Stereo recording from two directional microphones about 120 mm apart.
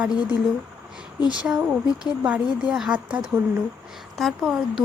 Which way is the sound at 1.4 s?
10° right (ahead or behind).